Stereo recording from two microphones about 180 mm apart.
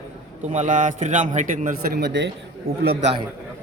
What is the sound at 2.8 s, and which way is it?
Speech, 55° right (ahead or behind).